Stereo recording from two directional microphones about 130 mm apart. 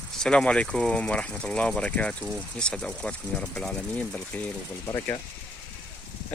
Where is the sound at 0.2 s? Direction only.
5° left (ahead or behind).